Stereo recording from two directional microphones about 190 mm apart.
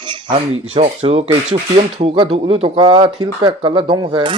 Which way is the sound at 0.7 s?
30° right (ahead or behind).